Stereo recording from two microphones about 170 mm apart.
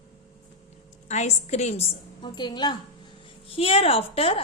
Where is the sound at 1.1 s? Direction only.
40° left (ahead or behind).